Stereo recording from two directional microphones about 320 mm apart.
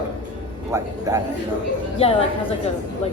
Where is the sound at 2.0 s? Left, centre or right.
Centre.